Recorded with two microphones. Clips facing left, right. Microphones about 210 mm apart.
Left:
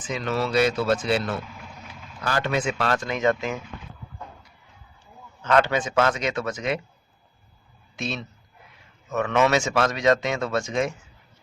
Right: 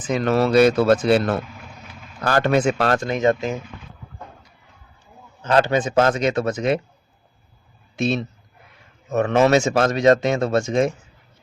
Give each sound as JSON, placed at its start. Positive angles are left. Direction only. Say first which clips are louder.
{"t": 0.0, "sound": "speech", "louder": "right 7 dB", "side_deg": -55}
{"t": 5.4, "sound": "a man's voice", "louder": "right 3 dB", "side_deg": -35}
{"t": 9.0, "sound": "a man's voice", "louder": "right 5 dB", "side_deg": -40}
{"t": 10.5, "sound": "speech", "louder": "right 6 dB", "side_deg": -30}